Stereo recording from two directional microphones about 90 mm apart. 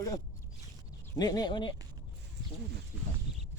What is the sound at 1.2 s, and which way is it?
Speech, 50° left (ahead or behind).